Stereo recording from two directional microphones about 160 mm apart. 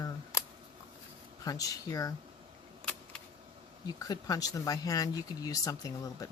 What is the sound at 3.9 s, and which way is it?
Speech, 25° left (ahead or behind).